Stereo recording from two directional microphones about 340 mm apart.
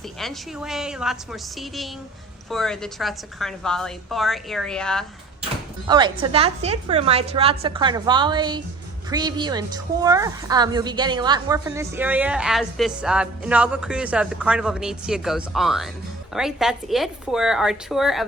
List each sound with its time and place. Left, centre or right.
0.2 s a woman's voice: centre
5.9 s a woman's voice: centre